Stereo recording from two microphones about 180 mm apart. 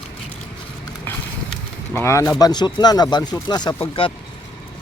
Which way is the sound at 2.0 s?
15° left (ahead or behind).